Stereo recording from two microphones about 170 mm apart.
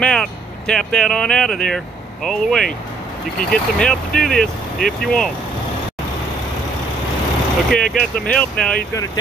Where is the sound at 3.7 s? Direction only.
5° left (ahead or behind).